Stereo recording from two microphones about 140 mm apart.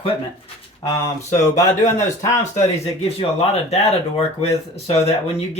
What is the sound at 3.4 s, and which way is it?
Speech, 45° left (ahead or behind).